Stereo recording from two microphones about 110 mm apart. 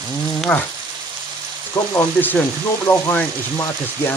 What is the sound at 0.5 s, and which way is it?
Speech, 20° left (ahead or behind).